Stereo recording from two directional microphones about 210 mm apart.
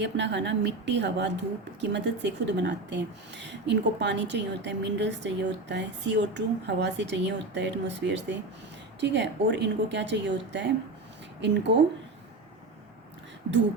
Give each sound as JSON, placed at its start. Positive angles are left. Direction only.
{"t": 0.0, "sound": "speech", "side_deg": -55}